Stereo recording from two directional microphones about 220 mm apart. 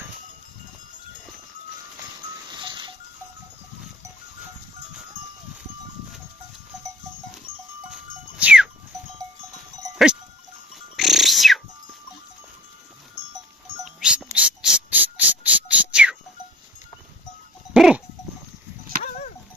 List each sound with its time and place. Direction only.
2.6 s music: 20° right (ahead or behind)
8.4 s goat: 5° right (ahead or behind)
10.9 s a sound: centre (ahead or behind)
13.8 s a sound: centre (ahead or behind)
15.7 s music: 5° right (ahead or behind)
17.7 s sheep: centre (ahead or behind)